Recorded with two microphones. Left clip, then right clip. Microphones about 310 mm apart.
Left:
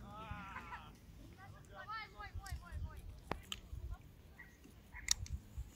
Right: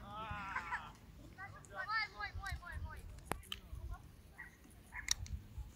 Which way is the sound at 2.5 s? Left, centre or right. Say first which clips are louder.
Right 6 dB; centre.